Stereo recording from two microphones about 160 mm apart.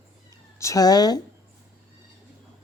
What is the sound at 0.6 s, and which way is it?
Speech, 20° left (ahead or behind).